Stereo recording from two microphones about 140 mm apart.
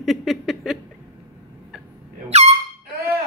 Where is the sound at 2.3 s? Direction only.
50° right (ahead or behind).